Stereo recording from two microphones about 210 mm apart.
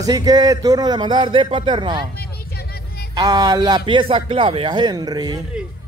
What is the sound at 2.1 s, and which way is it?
Music, 50° left (ahead or behind).